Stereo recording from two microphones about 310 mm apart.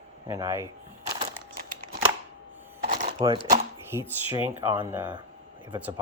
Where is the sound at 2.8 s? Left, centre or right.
Right.